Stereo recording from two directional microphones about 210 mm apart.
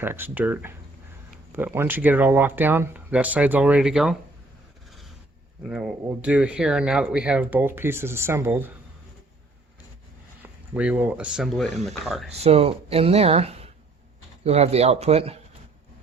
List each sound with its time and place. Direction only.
0.0 s speech: 10° right (ahead or behind)
5.6 s speech: 5° right (ahead or behind)
10.4 s speech: 5° right (ahead or behind)
12.3 s speech: 30° right (ahead or behind)